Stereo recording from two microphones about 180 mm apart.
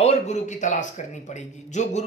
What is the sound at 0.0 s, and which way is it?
Speech, 40° left (ahead or behind).